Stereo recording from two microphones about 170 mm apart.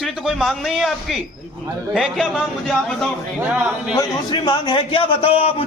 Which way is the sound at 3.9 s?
20° left (ahead or behind).